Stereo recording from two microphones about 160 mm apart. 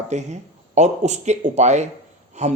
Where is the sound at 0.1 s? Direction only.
45° right (ahead or behind).